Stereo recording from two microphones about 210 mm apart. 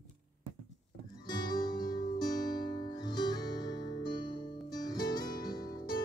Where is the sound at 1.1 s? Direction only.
20° left (ahead or behind).